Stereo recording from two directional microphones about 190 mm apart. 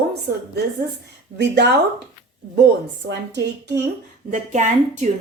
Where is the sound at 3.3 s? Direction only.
60° right (ahead or behind).